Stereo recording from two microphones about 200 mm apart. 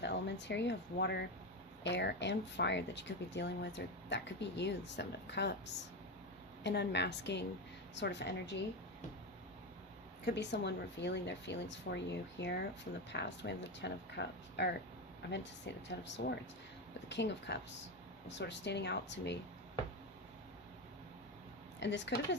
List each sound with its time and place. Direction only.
0.0 s speech: 60° left (ahead or behind)
10.2 s speech: 60° left (ahead or behind)
21.8 s a woman's voice: 60° left (ahead or behind)